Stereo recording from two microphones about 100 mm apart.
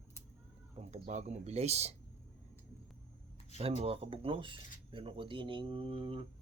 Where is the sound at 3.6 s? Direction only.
85° right.